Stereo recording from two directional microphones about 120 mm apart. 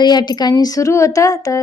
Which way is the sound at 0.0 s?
35° left (ahead or behind).